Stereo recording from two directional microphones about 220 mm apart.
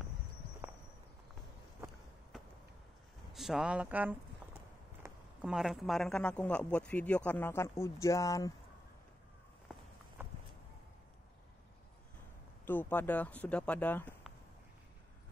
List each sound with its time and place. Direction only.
3.3 s a man's voice: centre (ahead or behind); by 8.5 s 15° left (ahead or behind)
12.6 s speech: 10° left (ahead or behind)